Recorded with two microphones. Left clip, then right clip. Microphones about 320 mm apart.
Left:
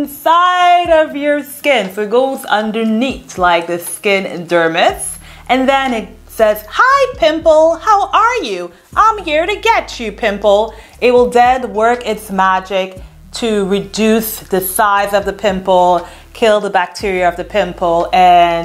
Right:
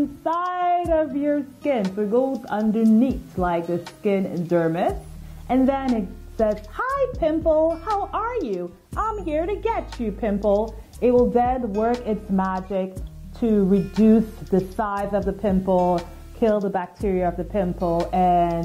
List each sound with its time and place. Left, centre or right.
0.2 s a woman's voice: centre
7.4 s a woman's voice: left
8.1 s speech: centre
10.4 s a woman's voice: left
11.0 s speech: centre
15.7 s a woman's voice: left
16.0 s speech: centre